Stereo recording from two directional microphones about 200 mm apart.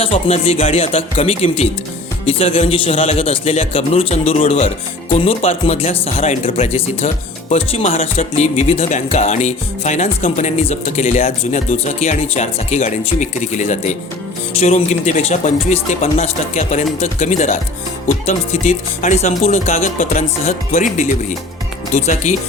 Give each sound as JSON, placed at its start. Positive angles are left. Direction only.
{"t": 0.0, "sound": "a man's voice", "side_deg": 30}